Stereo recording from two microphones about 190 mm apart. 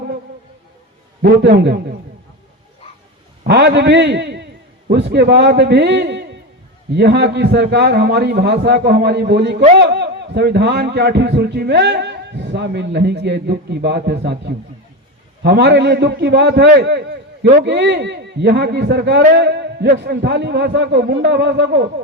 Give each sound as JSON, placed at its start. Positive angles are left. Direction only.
{"t": 1.2, "sound": "a man's voice", "side_deg": -60}
{"t": 3.4, "sound": "a man's voice", "side_deg": -60}